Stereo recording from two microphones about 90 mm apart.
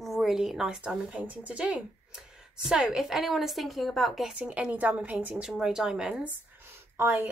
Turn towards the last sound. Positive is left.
turn(degrees=-20)  # may be behind; listen again after turning